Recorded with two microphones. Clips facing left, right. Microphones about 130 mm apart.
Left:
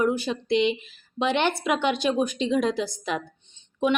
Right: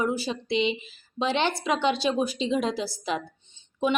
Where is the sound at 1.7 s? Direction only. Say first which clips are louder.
Even; 30° right (ahead or behind).